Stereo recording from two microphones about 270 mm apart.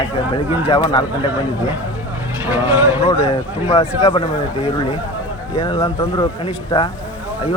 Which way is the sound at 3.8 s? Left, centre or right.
Left.